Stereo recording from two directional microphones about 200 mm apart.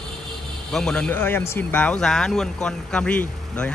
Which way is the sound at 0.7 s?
5° left (ahead or behind).